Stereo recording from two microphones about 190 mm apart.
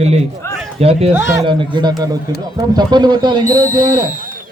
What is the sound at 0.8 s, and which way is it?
Speech, 30° right (ahead or behind).